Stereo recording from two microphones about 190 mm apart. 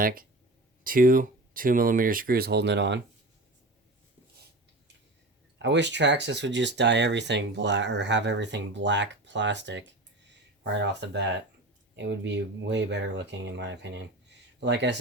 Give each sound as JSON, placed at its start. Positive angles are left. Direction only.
{"t": 0.0, "sound": "speech", "side_deg": -50}
{"t": 5.6, "sound": "speech", "side_deg": -70}